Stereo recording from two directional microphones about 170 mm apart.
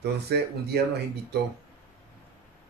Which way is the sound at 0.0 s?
70° right (ahead or behind).